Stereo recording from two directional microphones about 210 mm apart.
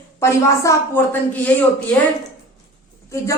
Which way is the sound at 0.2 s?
15° left (ahead or behind).